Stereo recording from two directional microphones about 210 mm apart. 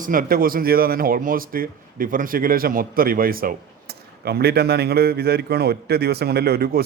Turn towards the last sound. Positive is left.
turn(degrees=-45)  # may be behind; listen again after turning